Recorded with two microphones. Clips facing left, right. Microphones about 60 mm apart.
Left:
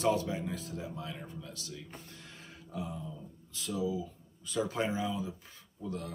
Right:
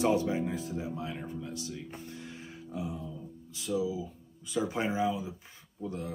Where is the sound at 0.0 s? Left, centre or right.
Right.